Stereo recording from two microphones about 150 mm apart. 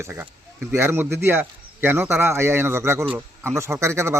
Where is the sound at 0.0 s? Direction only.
15° right (ahead or behind).